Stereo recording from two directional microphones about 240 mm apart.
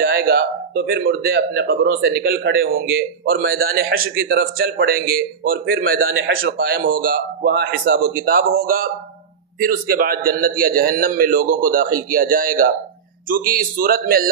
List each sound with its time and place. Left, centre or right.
0.0 s speech: right